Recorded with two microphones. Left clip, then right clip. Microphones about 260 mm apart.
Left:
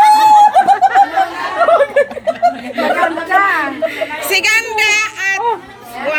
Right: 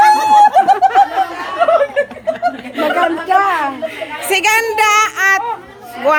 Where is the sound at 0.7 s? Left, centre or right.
Right.